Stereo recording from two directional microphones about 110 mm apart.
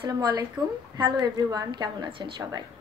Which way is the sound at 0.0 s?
40° right (ahead or behind).